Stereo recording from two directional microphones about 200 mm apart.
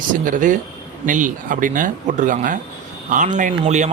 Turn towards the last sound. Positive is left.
turn(degrees=-35)  # may be behind; listen again after turning